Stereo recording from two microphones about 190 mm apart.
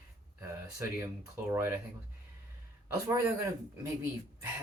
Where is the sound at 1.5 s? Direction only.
10° right (ahead or behind).